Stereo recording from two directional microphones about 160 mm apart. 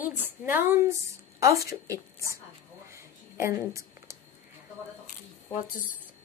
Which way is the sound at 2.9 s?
15° right (ahead or behind).